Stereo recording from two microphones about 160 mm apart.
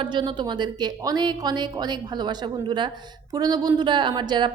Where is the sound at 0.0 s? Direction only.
30° right (ahead or behind).